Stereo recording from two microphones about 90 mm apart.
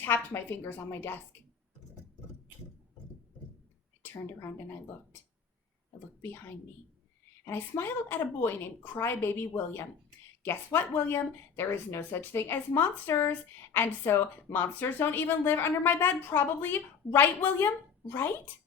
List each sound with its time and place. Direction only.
0.0 s speech: 25° left (ahead or behind)
4.0 s a woman's voice: 25° left (ahead or behind)
7.4 s speech: 25° left (ahead or behind)